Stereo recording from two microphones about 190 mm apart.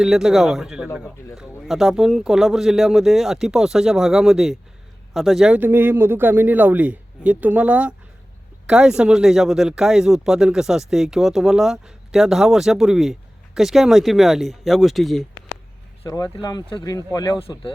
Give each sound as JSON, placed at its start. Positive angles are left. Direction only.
{"t": 0.0, "sound": "speech", "side_deg": 0}
{"t": 16.0, "sound": "speech", "side_deg": 20}